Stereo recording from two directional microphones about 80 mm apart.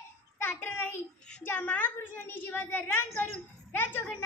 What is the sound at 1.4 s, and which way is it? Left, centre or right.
A woman's voice, left.